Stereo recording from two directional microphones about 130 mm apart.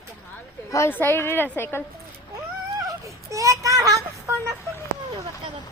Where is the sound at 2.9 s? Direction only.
25° right (ahead or behind).